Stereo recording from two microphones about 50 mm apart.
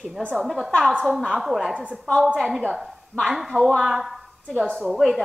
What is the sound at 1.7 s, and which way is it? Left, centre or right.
Speech, right.